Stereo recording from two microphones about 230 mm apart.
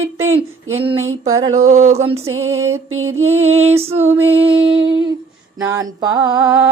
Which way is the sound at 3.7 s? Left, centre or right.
Right.